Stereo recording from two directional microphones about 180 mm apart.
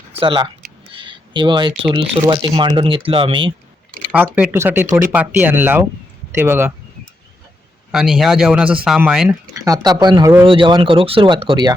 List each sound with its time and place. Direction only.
0.1 s speech: 30° right (ahead or behind)
4.1 s speech: 10° right (ahead or behind)
7.9 s speech: 5° right (ahead or behind)
9.6 s speech: 20° right (ahead or behind)